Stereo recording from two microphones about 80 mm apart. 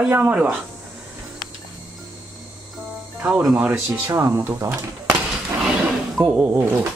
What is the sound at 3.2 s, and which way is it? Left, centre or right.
Speech, right.